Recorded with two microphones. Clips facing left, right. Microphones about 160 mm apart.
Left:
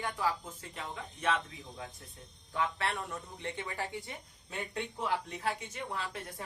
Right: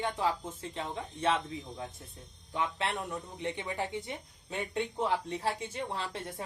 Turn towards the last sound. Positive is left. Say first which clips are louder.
# right 2 dB
turn(degrees=-25)  # may be behind; listen again after turning